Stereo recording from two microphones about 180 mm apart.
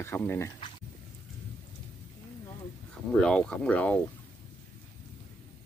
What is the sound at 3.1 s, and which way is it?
Speech, 5° left (ahead or behind).